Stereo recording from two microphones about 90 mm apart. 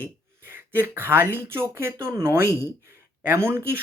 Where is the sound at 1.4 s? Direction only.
25° right (ahead or behind).